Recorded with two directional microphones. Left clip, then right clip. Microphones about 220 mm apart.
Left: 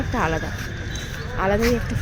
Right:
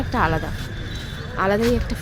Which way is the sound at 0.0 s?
15° right (ahead or behind).